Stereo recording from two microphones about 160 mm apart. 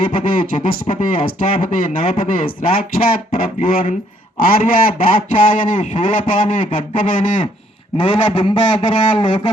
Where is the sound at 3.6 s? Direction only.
60° left (ahead or behind).